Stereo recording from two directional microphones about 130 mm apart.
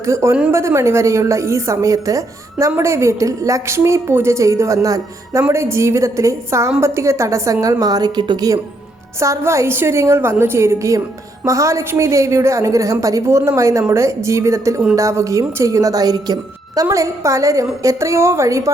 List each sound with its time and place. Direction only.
0.0 s a woman's voice: 20° right (ahead or behind)